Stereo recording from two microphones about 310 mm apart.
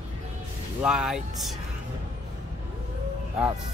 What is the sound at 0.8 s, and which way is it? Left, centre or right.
Speech, centre.